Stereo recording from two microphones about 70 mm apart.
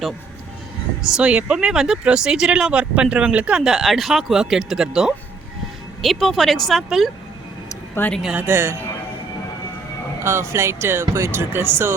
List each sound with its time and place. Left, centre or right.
1.0 s speech: centre
3.6 s speech: centre
8.0 s speech: left
8.4 s speech: right
10.2 s speech: right